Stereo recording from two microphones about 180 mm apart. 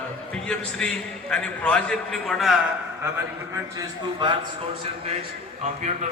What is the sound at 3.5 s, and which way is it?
Speech, 25° right (ahead or behind).